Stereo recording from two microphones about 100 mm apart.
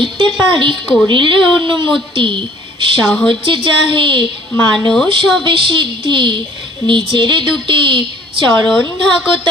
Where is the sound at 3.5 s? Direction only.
55° right (ahead or behind).